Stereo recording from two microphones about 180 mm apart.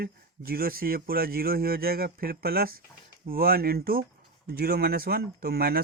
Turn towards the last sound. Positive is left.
turn(degrees=-60)  # may be behind; listen again after turning